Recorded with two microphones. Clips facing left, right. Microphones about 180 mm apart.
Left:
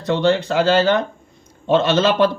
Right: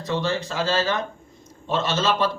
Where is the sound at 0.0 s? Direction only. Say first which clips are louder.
Left 8 dB; 65° left (ahead or behind).